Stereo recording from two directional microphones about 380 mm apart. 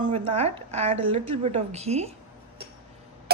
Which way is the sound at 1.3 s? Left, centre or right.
Centre.